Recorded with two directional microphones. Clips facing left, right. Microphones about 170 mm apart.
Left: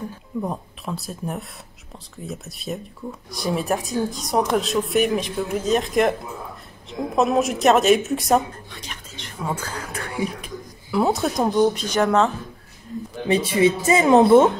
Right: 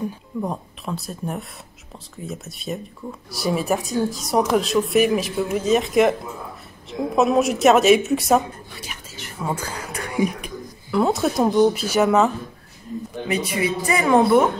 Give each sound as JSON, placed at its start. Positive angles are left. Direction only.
{"t": 0.4, "sound": "speech", "side_deg": 0}
{"t": 8.8, "sound": "a sound", "side_deg": -5}
{"t": 10.9, "sound": "speech", "side_deg": 0}
{"t": 13.3, "sound": "speech", "side_deg": 30}